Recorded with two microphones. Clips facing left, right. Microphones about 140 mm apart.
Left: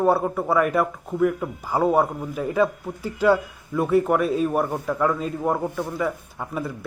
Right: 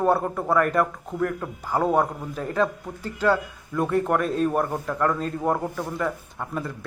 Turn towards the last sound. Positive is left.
turn(degrees=10)  # may be behind; listen again after turning